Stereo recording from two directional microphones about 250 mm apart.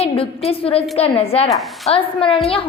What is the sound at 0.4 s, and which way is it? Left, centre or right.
A woman's voice, left.